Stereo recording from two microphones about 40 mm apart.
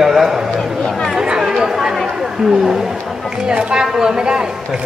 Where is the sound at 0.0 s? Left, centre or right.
Centre.